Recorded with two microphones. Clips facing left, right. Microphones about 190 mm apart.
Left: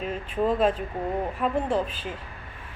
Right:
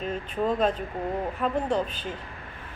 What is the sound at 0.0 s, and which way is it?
Speech, 5° left (ahead or behind).